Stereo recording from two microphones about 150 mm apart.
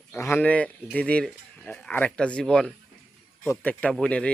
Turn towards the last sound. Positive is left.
turn(degrees=5)  # may be behind; listen again after turning